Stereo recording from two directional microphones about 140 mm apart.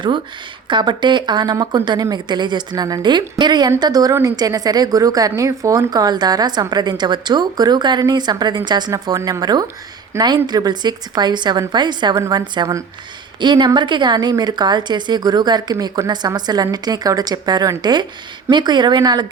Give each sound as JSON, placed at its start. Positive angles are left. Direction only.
{"t": 0.7, "sound": "a woman's voice", "side_deg": -35}